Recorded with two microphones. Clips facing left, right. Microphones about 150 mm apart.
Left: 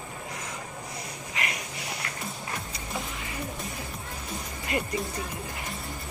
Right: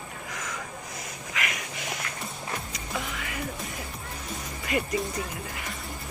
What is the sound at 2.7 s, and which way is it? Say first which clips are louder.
Music: right 1 dB; 25° left (ahead or behind).